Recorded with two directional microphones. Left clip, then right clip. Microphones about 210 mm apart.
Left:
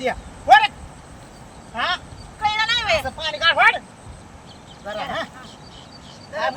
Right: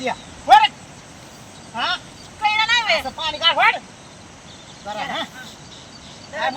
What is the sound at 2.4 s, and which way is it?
Cat, 20° left (ahead or behind).